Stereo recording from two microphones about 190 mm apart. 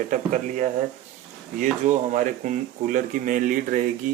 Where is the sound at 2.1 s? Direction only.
45° right (ahead or behind).